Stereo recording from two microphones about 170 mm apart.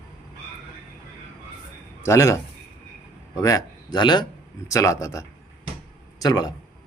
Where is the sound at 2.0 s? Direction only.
15° left (ahead or behind).